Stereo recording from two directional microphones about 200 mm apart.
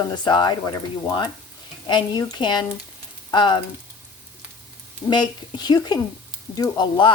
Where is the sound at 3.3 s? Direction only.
20° left (ahead or behind).